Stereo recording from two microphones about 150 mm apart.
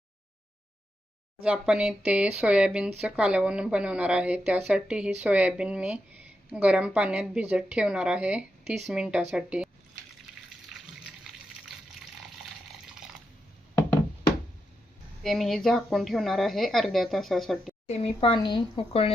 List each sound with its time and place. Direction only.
1.4 s speech: 5° right (ahead or behind)
11.0 s water: 5° right (ahead or behind)
15.2 s a woman's voice: centre (ahead or behind)
17.8 s speech: 40° left (ahead or behind)